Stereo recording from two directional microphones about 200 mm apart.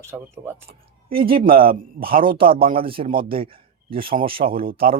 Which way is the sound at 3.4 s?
25° right (ahead or behind).